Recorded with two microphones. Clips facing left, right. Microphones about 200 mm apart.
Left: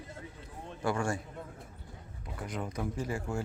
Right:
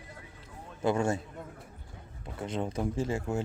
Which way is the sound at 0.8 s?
20° right (ahead or behind).